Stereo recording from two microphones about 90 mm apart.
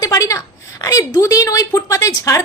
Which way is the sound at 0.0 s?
40° left (ahead or behind).